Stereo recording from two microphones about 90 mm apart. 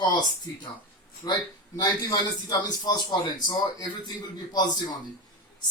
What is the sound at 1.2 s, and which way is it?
A man's voice, 45° left (ahead or behind).